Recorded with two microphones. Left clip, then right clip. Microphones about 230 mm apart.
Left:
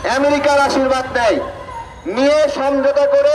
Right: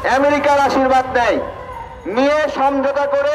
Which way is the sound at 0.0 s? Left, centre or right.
Right.